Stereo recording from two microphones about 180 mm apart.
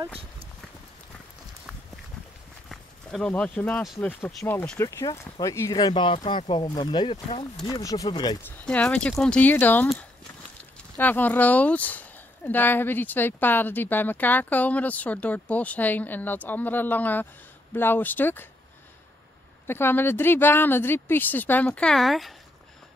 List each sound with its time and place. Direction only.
2.7 s speech: 5° left (ahead or behind); by 8.4 s 25° left (ahead or behind)
8.5 s speech: 5° left (ahead or behind)
11.0 s speech: 10° left (ahead or behind)
19.6 s speech: 10° left (ahead or behind)